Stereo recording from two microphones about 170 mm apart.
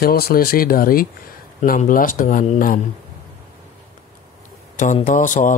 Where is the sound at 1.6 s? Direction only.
50° left (ahead or behind).